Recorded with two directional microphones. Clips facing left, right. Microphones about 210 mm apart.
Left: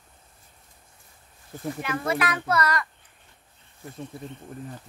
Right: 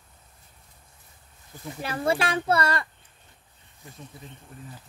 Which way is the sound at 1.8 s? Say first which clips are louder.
Right 2 dB; 30° right (ahead or behind).